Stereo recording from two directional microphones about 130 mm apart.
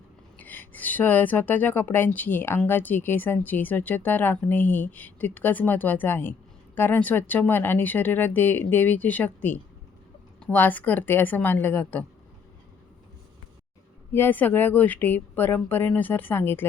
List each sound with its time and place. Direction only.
0.3 s speech: 15° left (ahead or behind)
14.1 s speech: 15° left (ahead or behind)